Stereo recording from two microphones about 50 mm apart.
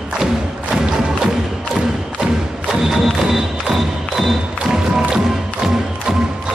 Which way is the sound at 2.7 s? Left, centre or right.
Centre.